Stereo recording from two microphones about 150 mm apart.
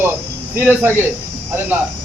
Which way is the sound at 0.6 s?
10° right (ahead or behind).